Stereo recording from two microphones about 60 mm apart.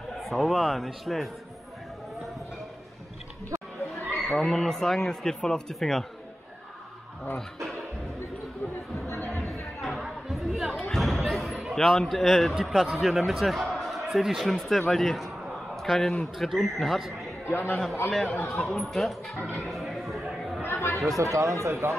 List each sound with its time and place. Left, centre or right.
0.2 s a man's voice: centre
3.4 s chatter: right
4.4 s speech: centre
9.5 s music: centre
10.8 s a man's voice: centre
17.5 s a man's voice: left
18.5 s a man's voice: centre
19.7 s chatter: centre
20.6 s chatter: left
21.2 s speech: right